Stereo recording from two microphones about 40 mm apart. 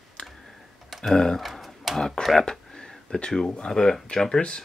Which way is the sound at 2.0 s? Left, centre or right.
Centre.